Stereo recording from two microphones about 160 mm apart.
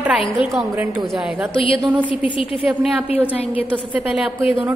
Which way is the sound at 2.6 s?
5° right (ahead or behind).